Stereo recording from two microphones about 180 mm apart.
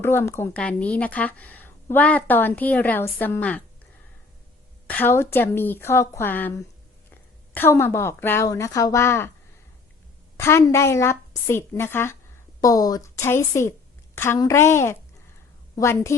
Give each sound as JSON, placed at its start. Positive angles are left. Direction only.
{"t": 0.0, "sound": "a woman's voice", "side_deg": 15}
{"t": 4.9, "sound": "a woman's voice", "side_deg": 10}
{"t": 10.3, "sound": "a woman's voice", "side_deg": 15}